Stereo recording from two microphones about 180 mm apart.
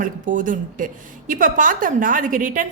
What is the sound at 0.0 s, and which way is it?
A woman's voice, 45° right (ahead or behind).